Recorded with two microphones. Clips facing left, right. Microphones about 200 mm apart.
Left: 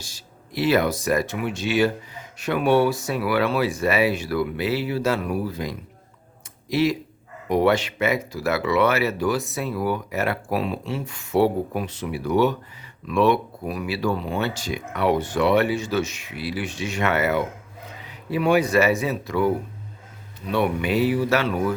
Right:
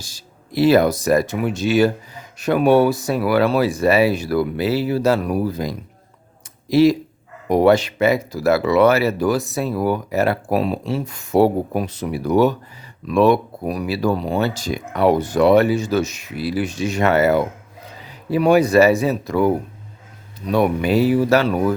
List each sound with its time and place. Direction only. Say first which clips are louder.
0.0 s speech: right 1 dB; 40° right (ahead or behind)